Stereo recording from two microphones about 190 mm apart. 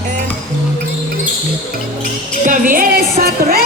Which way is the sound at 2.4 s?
45° right (ahead or behind).